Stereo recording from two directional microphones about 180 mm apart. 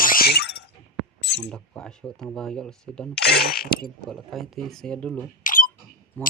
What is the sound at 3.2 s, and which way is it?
Speech, 60° left (ahead or behind).